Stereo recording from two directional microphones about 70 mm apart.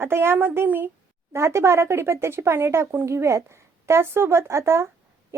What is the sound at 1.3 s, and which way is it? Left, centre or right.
Speech, right.